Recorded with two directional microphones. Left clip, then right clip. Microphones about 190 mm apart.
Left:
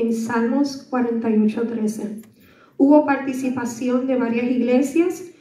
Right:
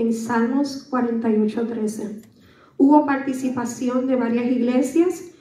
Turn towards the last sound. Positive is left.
turn(degrees=20)  # may be behind; listen again after turning